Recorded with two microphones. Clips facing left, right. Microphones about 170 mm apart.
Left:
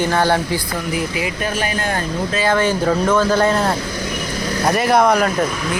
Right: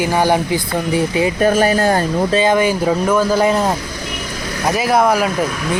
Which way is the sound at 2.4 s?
15° right (ahead or behind).